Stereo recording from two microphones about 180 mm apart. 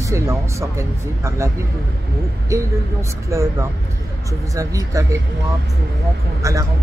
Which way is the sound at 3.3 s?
15° right (ahead or behind).